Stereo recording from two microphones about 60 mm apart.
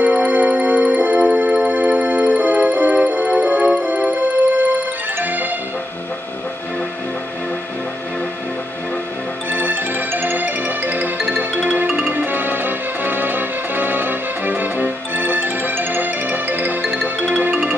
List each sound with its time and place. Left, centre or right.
0.0 s music: right
9.5 s music: right